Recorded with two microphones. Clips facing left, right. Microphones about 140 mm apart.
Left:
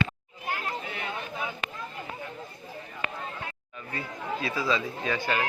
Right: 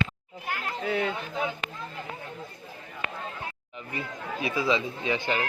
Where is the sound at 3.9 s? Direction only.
20° right (ahead or behind).